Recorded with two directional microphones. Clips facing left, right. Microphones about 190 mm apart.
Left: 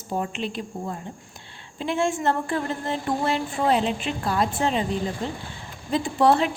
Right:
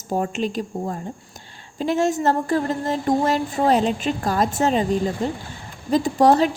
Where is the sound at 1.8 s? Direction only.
40° right (ahead or behind).